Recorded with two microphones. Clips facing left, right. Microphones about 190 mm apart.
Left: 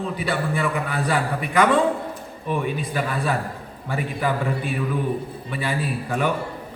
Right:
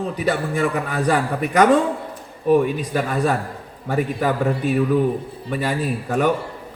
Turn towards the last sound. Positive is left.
turn(degrees=-45)  # may be behind; listen again after turning